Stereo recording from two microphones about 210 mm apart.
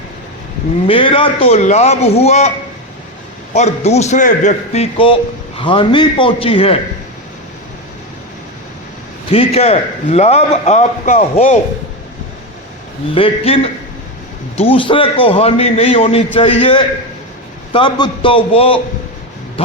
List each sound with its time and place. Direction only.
0.9 s a man's voice: 25° left (ahead or behind)
3.5 s a man's voice: 30° left (ahead or behind)
9.3 s a man's voice: 30° left (ahead or behind)
13.1 s a man's voice: 25° left (ahead or behind)